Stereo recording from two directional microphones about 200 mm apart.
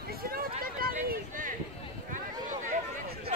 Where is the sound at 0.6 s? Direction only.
45° right (ahead or behind).